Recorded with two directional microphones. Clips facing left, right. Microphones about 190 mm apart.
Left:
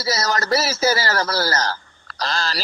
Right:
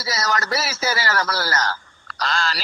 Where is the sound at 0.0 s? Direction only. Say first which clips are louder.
Left 2 dB; 40° left (ahead or behind).